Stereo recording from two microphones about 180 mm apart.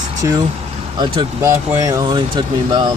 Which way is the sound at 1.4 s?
20° right (ahead or behind).